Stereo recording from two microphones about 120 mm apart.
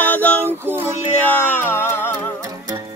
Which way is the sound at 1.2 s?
15° left (ahead or behind).